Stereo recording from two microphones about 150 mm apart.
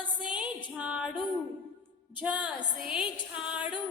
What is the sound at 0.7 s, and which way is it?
Music, 10° right (ahead or behind).